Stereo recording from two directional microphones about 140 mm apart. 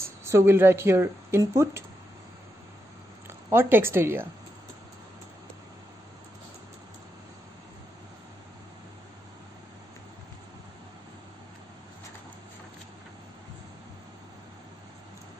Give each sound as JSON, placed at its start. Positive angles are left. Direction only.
{"t": 0.0, "sound": "speech", "side_deg": -20}
{"t": 3.3, "sound": "speech", "side_deg": -20}